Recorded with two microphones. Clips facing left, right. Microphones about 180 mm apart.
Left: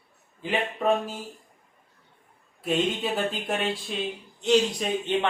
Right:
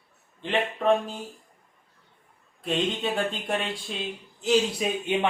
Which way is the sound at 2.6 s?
5° left (ahead or behind).